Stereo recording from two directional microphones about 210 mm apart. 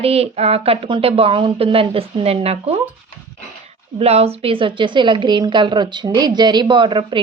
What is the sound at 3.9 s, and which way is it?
A woman's voice, 30° right (ahead or behind).